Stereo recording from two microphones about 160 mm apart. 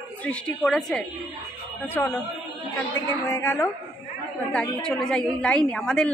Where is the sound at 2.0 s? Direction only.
15° left (ahead or behind).